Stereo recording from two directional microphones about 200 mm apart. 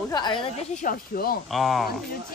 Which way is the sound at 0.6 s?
40° left (ahead or behind).